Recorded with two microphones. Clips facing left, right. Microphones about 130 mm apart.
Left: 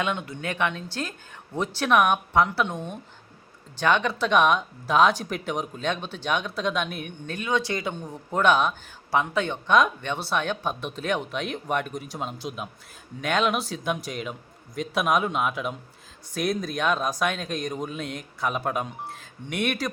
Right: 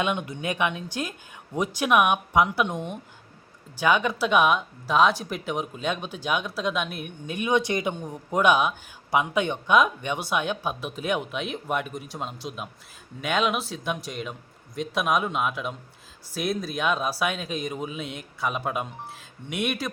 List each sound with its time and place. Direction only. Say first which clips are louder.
0.0 s speech: right 1 dB; 15° right (ahead or behind)
7.3 s speech: right 3 dB; 20° right (ahead or behind); by 19.9 s centre (ahead or behind)